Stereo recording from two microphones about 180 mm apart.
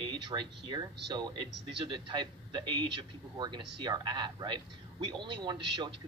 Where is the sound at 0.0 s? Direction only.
25° right (ahead or behind).